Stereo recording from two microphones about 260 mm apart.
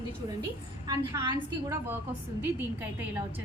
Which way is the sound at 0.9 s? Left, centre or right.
Centre.